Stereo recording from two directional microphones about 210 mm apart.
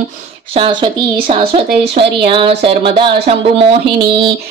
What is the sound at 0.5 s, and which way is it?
Speech, 25° right (ahead or behind).